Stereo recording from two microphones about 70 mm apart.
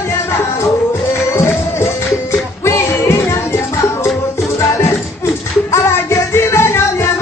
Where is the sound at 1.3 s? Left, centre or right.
Left.